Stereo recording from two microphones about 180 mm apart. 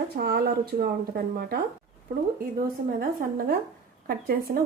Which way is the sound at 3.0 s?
55° right (ahead or behind).